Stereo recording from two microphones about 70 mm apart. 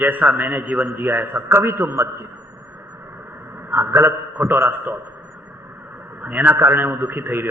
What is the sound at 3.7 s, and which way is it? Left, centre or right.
A man's voice, right.